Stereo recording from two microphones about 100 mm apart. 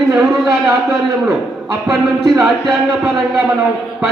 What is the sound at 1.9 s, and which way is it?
Music, 5° right (ahead or behind).